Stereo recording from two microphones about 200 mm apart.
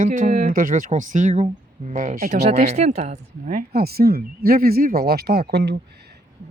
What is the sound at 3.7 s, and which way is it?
Speech, 50° right (ahead or behind).